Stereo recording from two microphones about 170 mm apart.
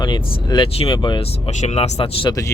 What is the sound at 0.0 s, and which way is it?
Speech, 25° left (ahead or behind).